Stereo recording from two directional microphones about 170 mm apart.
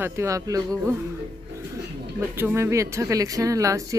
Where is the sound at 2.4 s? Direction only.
15° right (ahead or behind).